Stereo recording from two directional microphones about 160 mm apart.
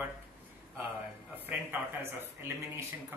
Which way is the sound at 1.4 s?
10° right (ahead or behind).